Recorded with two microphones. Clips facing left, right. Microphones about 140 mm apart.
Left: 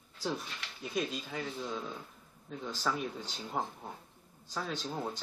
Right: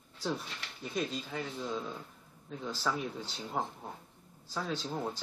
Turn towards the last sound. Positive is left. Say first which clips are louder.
# right 1 dB
turn(degrees=0)  # may be behind; listen again after turning